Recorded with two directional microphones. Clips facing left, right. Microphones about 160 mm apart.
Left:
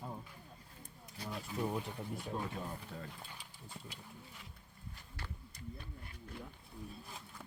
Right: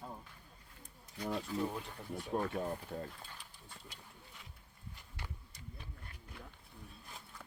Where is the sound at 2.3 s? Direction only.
45° right (ahead or behind).